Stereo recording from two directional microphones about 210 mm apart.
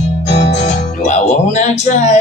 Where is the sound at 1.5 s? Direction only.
35° left (ahead or behind).